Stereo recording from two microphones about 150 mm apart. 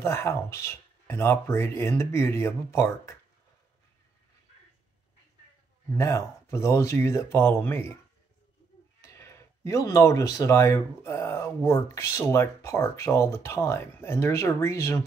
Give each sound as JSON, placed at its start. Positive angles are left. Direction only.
{"t": 0.0, "sound": "speech", "side_deg": 20}
{"t": 5.9, "sound": "speech", "side_deg": 20}
{"t": 9.0, "sound": "speech", "side_deg": 20}